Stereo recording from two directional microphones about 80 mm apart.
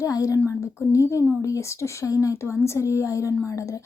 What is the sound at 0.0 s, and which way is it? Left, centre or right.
A woman's voice, left.